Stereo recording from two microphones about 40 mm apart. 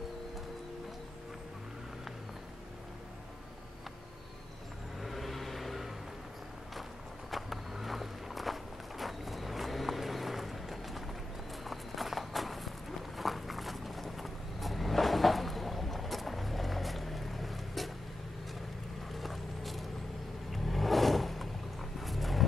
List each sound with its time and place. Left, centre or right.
5.0 s vehicle: centre
6.7 s walk: centre
13.2 s vehicle: centre
19.1 s vehicle: centre
22.0 s roaring cats: centre